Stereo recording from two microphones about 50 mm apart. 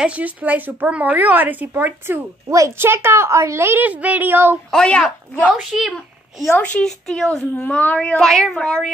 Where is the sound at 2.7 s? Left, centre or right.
Right.